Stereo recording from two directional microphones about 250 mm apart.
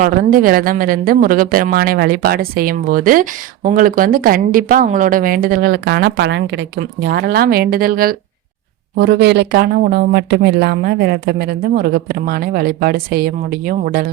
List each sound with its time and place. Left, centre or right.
0.0 s speech: right